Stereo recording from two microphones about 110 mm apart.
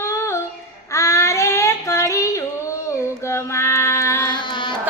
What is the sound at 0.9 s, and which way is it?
Child singing, 25° left (ahead or behind).